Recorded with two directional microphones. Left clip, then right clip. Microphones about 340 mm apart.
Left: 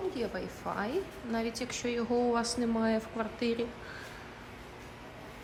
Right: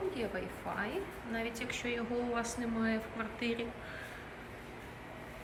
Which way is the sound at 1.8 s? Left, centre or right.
Centre.